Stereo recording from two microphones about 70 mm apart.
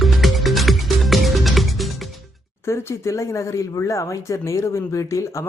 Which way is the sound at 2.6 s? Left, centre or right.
Left.